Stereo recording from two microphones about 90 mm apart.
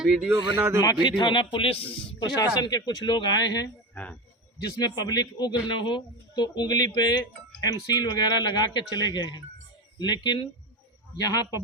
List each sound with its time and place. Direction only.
0.0 s speech: 5° right (ahead or behind)
0.3 s speech: 50° right (ahead or behind)
1.0 s speech: 60° left (ahead or behind); by 1.8 s 75° left (ahead or behind)
2.1 s speech: 45° left (ahead or behind)
3.9 s speech: 15° left (ahead or behind)
4.5 s speech: 50° left (ahead or behind)
11.2 s speech: 45° left (ahead or behind)